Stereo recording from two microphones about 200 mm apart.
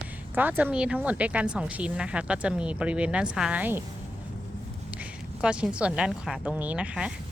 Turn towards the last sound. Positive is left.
turn(degrees=-5)  # may be behind; listen again after turning